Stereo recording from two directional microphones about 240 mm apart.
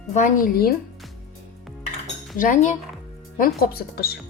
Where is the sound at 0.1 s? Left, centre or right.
Left.